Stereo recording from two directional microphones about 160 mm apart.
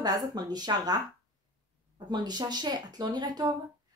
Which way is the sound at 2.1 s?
25° right (ahead or behind).